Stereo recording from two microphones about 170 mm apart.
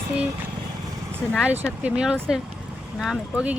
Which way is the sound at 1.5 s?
10° right (ahead or behind).